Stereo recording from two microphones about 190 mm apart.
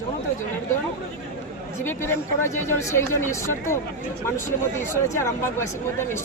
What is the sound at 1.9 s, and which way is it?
Speech, 10° left (ahead or behind).